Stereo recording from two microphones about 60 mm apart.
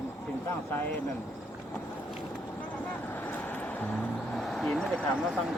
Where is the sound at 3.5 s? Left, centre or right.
Left.